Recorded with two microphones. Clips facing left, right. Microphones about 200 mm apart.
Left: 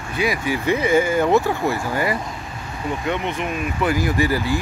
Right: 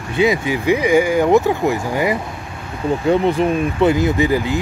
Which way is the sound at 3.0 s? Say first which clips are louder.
Right 11 dB; 35° right (ahead or behind).